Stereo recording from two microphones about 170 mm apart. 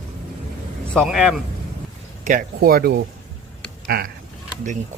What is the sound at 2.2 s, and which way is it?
Speech, 50° right (ahead or behind).